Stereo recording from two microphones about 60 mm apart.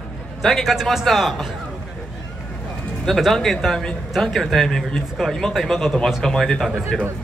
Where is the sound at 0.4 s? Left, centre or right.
Centre.